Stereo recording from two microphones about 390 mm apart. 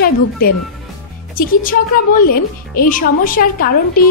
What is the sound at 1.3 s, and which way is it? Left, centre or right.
A woman's voice, left.